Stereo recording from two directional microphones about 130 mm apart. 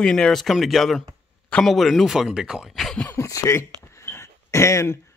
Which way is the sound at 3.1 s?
25° left (ahead or behind).